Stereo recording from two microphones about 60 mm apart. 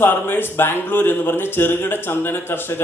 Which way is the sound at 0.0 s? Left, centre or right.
Left.